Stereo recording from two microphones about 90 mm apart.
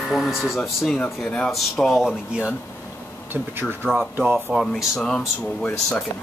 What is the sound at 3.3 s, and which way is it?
Speech, 20° right (ahead or behind).